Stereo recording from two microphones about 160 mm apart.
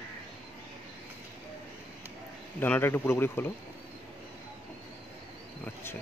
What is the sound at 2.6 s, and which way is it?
Speech, 15° left (ahead or behind).